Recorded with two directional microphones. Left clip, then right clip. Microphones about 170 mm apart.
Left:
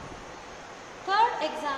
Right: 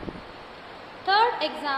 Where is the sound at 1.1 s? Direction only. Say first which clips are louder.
Right 3 dB; 40° right (ahead or behind).